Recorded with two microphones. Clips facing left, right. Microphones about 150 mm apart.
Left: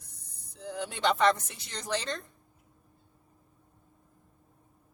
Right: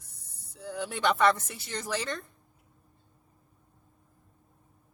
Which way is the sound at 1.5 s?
10° right (ahead or behind).